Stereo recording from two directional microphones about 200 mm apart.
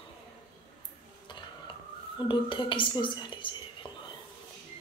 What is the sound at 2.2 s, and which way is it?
Speech, 25° left (ahead or behind).